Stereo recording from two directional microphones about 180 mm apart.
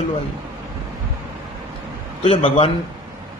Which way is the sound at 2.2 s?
30° left (ahead or behind).